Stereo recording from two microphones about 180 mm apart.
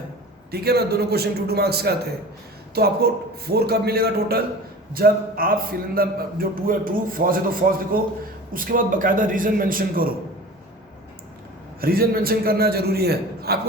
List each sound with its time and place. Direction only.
0.5 s a man's voice: 60° right (ahead or behind)
11.8 s a man's voice: 55° right (ahead or behind)